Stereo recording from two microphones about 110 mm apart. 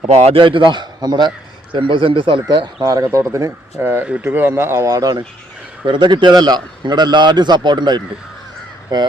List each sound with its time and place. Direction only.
0.0 s a man's voice: 70° right (ahead or behind)
0.3 s a man's voice: 50° right (ahead or behind)
2.8 s speech: 30° right (ahead or behind)
5.8 s a man's voice: 45° right (ahead or behind)